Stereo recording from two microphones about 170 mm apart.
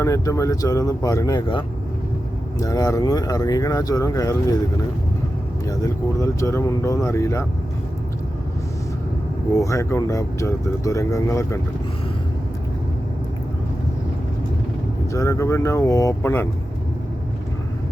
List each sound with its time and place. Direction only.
0.0 s speech: 20° left (ahead or behind)
5.6 s speech: 20° left (ahead or behind)
9.6 s speech: 20° left (ahead or behind)
15.1 s speech: 20° left (ahead or behind)